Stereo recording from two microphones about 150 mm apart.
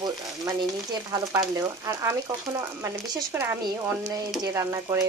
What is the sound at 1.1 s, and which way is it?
Speech, 20° right (ahead or behind).